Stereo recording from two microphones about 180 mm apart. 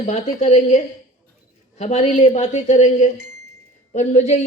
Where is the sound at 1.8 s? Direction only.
35° left (ahead or behind).